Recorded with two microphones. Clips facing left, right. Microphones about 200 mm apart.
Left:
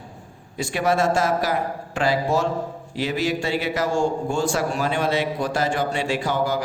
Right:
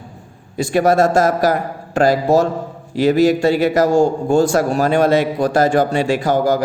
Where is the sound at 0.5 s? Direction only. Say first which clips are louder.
Right 8 dB; 40° right (ahead or behind).